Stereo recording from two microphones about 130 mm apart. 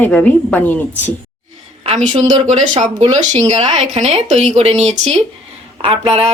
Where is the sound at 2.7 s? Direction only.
60° right (ahead or behind).